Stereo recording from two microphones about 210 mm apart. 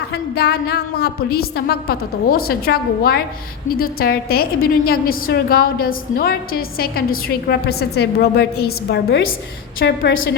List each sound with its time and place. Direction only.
0.1 s a woman's voice: 50° left (ahead or behind)